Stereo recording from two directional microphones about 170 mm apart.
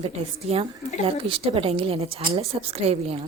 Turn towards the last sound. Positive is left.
turn(degrees=-35)  # may be behind; listen again after turning